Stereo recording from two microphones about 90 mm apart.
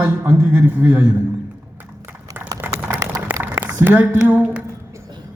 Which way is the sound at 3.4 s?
25° right (ahead or behind).